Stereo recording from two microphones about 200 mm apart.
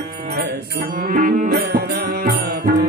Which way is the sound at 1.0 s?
40° right (ahead or behind).